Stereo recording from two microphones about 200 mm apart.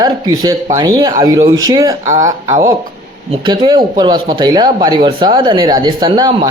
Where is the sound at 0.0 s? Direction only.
20° right (ahead or behind).